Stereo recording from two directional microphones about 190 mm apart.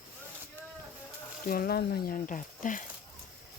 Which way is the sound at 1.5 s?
50° left (ahead or behind).